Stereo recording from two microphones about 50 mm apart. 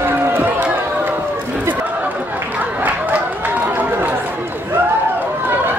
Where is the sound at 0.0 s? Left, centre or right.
Right.